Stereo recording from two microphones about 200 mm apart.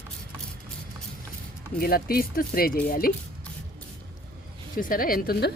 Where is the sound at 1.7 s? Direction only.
50° left (ahead or behind).